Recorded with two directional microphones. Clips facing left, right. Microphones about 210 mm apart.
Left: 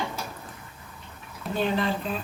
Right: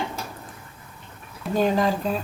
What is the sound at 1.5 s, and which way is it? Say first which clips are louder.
Speech: right 5 dB; 40° right (ahead or behind).